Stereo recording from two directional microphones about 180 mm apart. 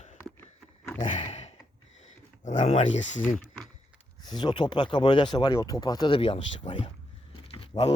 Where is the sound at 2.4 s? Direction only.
45° left (ahead or behind).